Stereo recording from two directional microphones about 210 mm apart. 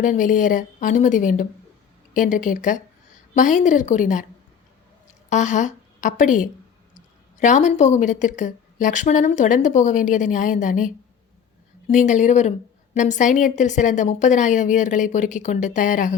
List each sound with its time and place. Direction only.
0.0 s a woman's voice: 40° left (ahead or behind)
5.3 s a woman's voice: 35° left (ahead or behind)